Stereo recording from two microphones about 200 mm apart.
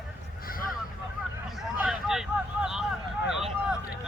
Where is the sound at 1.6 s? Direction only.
5° right (ahead or behind).